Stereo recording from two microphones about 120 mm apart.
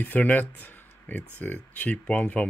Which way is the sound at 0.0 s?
15° left (ahead or behind).